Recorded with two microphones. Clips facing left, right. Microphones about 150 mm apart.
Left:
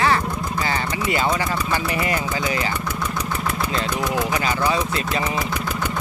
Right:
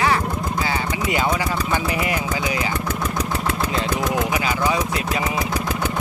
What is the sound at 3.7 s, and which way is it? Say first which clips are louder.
Vehicle: right 1 dB; 20° right (ahead or behind).